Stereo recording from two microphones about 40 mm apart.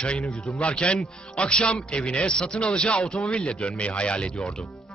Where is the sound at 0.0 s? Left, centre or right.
Left.